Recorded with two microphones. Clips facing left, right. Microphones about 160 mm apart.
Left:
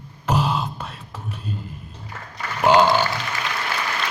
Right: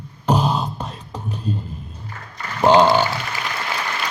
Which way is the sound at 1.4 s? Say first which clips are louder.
Right 7 dB; 35° right (ahead or behind).